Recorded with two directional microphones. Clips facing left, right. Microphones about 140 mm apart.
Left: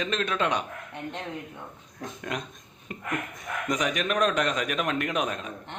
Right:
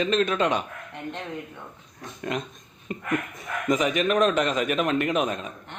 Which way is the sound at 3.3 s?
Centre (ahead or behind).